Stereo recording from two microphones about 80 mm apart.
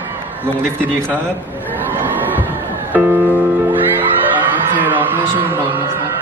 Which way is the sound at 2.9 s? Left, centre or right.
Right.